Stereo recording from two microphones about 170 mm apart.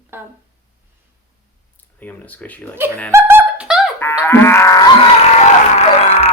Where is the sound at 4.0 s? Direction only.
15° left (ahead or behind).